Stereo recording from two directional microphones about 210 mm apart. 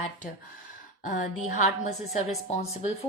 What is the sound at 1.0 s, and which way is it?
A woman's voice, 35° left (ahead or behind).